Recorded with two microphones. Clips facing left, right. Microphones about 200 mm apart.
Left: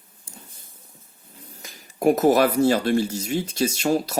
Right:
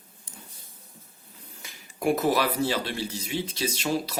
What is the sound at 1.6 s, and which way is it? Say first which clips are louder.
Speech: left 6 dB; 40° left (ahead or behind).